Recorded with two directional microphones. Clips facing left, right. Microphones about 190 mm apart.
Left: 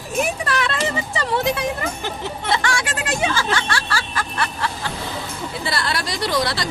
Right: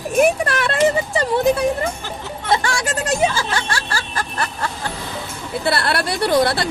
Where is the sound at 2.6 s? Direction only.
40° right (ahead or behind).